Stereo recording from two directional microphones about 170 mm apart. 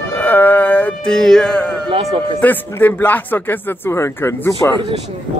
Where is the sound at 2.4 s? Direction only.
10° left (ahead or behind).